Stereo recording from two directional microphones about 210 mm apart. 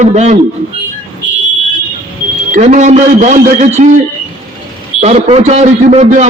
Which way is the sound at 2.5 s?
35° right (ahead or behind).